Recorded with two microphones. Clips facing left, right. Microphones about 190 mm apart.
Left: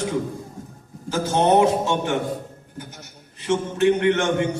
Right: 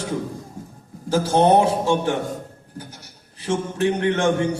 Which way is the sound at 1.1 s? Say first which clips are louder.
Right 2 dB; 35° right (ahead or behind).